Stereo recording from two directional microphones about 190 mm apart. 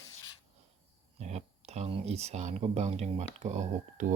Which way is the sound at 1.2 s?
35° right (ahead or behind).